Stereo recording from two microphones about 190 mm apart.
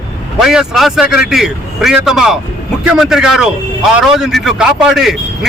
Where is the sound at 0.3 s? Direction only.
Centre (ahead or behind).